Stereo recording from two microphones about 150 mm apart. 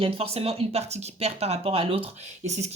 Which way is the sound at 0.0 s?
40° right (ahead or behind).